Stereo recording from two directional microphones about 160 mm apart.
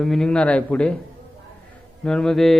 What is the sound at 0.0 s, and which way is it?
Mantra, 5° left (ahead or behind).